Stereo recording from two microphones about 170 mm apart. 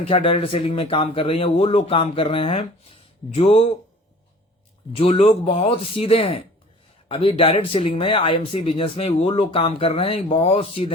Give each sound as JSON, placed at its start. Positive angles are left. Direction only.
{"t": 0.0, "sound": "speech", "side_deg": 35}
{"t": 4.9, "sound": "speech", "side_deg": 35}